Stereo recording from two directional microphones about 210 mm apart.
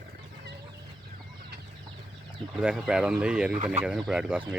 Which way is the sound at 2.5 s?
5° right (ahead or behind).